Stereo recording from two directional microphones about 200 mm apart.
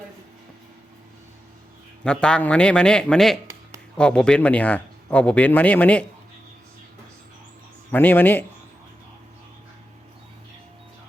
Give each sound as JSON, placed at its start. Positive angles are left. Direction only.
{"t": 2.0, "sound": "a man's voice", "side_deg": 5}
{"t": 7.9, "sound": "speech", "side_deg": 10}